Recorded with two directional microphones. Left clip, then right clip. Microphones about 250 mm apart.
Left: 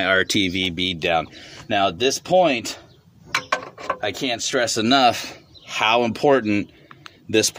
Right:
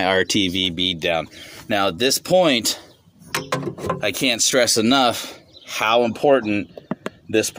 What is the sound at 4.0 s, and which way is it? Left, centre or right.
Speech, right.